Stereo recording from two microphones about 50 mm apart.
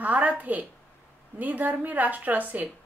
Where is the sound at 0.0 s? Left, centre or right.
Right.